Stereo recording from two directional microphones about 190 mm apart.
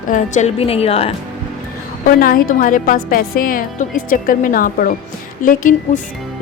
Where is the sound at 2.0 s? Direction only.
45° left (ahead or behind).